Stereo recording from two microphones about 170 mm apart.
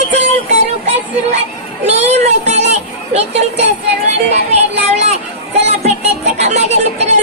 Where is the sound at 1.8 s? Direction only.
40° right (ahead or behind).